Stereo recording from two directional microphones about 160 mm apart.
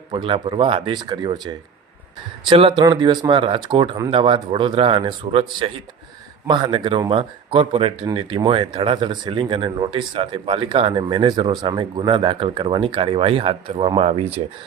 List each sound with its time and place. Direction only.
0.1 s speech: 35° right (ahead or behind)